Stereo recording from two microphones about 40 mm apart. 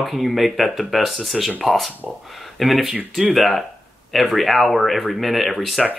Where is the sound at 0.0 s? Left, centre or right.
Centre.